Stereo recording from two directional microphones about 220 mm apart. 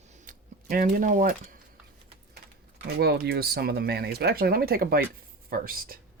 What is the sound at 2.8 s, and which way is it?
Speech, 45° right (ahead or behind).